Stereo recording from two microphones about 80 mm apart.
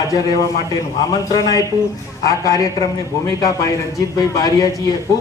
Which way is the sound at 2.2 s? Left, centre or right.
Left.